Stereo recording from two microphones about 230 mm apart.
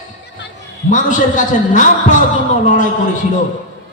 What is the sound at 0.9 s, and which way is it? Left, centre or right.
A man's voice, left.